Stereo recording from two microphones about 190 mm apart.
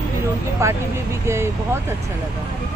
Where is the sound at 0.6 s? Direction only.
15° right (ahead or behind).